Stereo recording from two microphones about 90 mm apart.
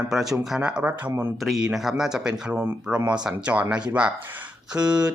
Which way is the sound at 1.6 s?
5° right (ahead or behind).